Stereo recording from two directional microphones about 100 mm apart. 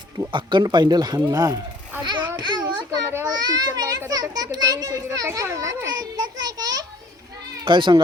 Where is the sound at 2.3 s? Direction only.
45° right (ahead or behind).